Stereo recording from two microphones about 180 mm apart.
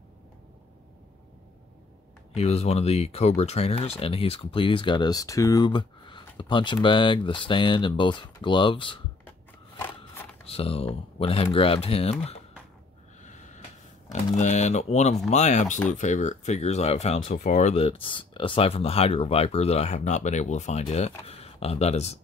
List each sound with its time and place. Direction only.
2.3 s speech: 35° left (ahead or behind)
10.4 s speech: 30° left (ahead or behind)
13.2 s snort: 40° left (ahead or behind)
14.3 s speech: 40° left (ahead or behind)